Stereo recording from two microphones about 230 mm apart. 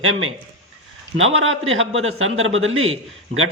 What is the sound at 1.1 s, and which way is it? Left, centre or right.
A man's voice, right.